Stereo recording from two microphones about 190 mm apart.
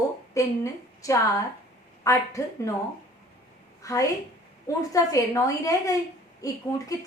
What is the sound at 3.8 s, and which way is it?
A woman's voice, 15° left (ahead or behind).